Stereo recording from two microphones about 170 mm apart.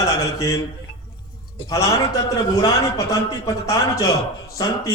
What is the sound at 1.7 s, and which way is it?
A man's voice, 20° left (ahead or behind).